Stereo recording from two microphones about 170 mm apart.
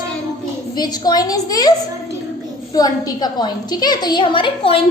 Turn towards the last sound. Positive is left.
turn(degrees=30)  # may be behind; listen again after turning